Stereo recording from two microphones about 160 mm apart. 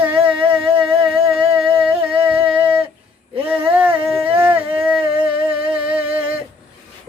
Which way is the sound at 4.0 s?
35° right (ahead or behind).